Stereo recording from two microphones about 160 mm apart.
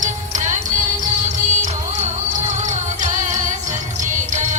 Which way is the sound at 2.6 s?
50° right (ahead or behind).